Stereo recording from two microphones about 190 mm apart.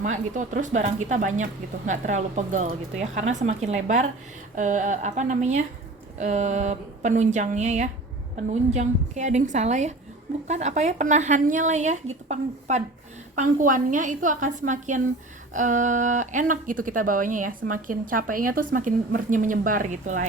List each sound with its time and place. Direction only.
0.0 s speech: 40° right (ahead or behind)